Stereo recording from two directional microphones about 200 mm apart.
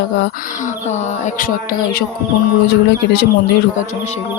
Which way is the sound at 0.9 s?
40° left (ahead or behind).